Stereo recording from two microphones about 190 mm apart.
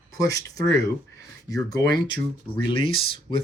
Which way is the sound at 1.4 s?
20° left (ahead or behind).